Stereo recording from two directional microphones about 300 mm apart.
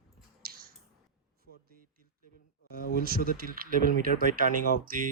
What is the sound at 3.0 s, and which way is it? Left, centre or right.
Speech, right.